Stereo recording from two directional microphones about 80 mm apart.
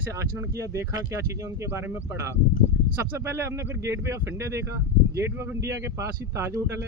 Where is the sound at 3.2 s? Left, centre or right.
Right.